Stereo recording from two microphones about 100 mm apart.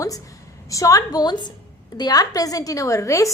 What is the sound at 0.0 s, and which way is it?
A woman's voice, 35° left (ahead or behind).